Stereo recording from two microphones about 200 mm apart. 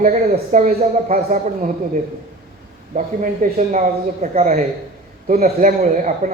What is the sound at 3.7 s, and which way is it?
Speech, 35° right (ahead or behind).